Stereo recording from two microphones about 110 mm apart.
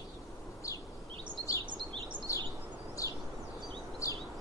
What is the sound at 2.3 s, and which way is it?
Bird, 30° left (ahead or behind).